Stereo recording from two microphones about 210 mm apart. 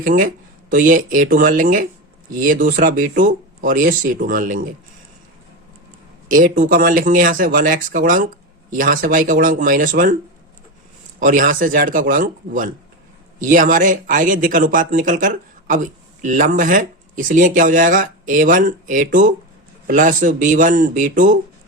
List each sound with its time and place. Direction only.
0.0 s speech: 40° right (ahead or behind)
6.2 s speech: 40° right (ahead or behind)
11.2 s speech: 40° right (ahead or behind)